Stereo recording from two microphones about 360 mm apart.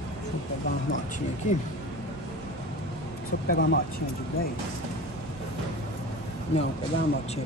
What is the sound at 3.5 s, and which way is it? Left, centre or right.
Speech, left.